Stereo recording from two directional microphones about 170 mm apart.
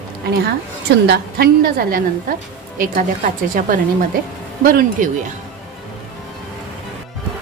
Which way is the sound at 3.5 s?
55° right (ahead or behind).